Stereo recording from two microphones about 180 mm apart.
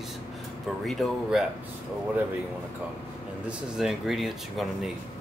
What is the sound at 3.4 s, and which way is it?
Speech, centre (ahead or behind).